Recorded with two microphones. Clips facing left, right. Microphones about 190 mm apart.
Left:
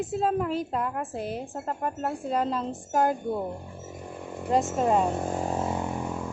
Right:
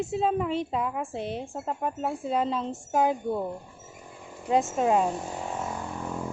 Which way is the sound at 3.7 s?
60° left (ahead or behind).